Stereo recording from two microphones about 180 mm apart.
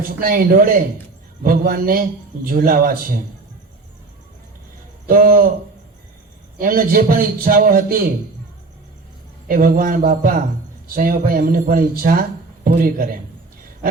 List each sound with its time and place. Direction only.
0.2 s a man's voice: 55° right (ahead or behind)
5.0 s a man's voice: 55° right (ahead or behind)
6.6 s a man's voice: 50° right (ahead or behind)
9.5 s a man's voice: 50° right (ahead or behind)